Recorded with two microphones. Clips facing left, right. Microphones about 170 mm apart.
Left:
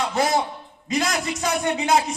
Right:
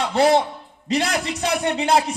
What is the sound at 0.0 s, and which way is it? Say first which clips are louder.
A man's voice: right 5 dB; 30° right (ahead or behind).